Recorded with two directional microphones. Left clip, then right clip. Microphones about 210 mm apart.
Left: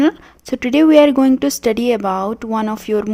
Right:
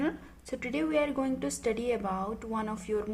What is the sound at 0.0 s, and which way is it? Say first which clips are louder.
A woman's voice: left 17 dB; 45° left (ahead or behind).